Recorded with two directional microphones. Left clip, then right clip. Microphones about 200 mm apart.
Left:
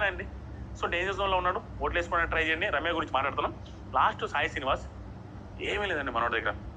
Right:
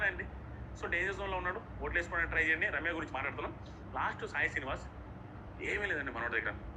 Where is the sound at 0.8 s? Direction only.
20° left (ahead or behind).